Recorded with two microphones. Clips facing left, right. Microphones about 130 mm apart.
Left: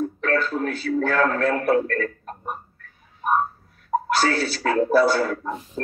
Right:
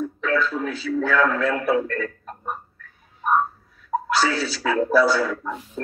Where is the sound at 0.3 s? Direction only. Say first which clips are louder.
Even; 55° left (ahead or behind).